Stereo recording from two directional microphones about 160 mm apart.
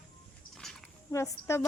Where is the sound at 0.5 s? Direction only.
5° left (ahead or behind).